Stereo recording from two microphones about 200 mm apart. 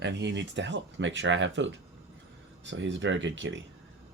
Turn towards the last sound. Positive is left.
turn(degrees=-65)  # may be behind; listen again after turning